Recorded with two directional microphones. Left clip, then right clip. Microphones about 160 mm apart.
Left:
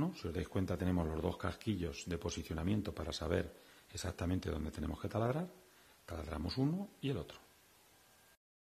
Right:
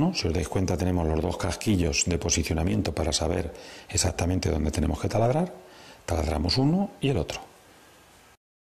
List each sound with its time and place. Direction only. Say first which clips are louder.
0.0 s speech: right 14 dB; 15° right (ahead or behind)